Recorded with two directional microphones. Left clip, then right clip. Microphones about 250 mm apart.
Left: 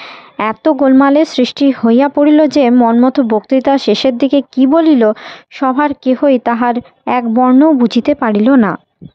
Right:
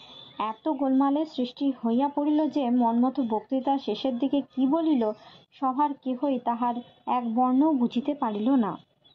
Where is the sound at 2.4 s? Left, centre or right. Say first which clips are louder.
Left 17 dB; left.